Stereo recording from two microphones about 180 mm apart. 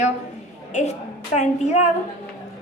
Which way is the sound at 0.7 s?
40° left (ahead or behind).